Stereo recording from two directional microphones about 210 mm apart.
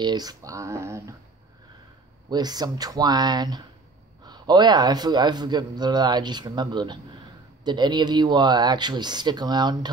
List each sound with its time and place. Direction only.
0.0 s speech: 20° right (ahead or behind)
2.2 s a man's voice: 20° right (ahead or behind)